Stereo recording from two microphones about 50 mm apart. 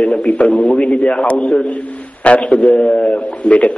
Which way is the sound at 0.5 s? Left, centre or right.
Left.